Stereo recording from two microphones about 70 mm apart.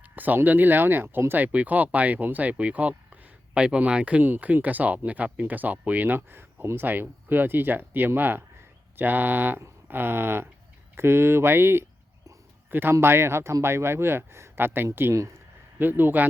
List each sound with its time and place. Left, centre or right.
0.2 s a man's voice: right